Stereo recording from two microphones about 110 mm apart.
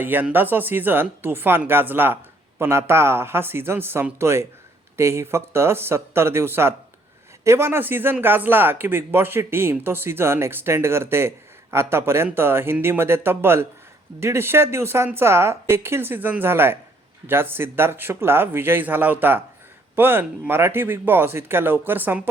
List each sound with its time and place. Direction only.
0.0 s speech: 15° right (ahead or behind)